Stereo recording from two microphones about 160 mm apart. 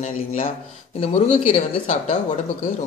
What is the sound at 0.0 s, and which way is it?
Speech, 45° left (ahead or behind).